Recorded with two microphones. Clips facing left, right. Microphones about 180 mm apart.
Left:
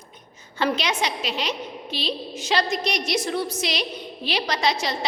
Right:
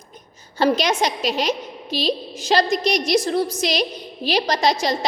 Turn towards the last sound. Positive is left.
turn(degrees=-40)  # may be behind; listen again after turning